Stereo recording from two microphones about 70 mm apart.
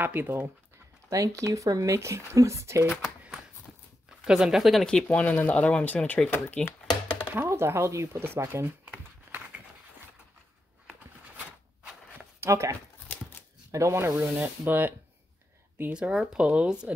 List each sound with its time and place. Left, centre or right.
0.0 s speech: right
1.1 s speech: right
4.2 s speech: centre
5.0 s speech: left
6.3 s speech: left
7.3 s speech: right
8.8 s crumpling: right
10.9 s a sound: right
12.4 s speech: right
14.4 s speech: right
15.9 s speech: centre